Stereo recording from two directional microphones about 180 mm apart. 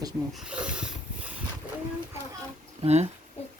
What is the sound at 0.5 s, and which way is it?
Dog, 5° right (ahead or behind).